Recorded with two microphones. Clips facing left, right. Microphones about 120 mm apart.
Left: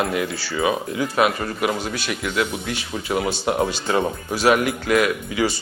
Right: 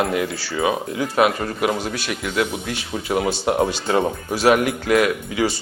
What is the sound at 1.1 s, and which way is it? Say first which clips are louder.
Speech: right 2 dB; 30° right (ahead or behind).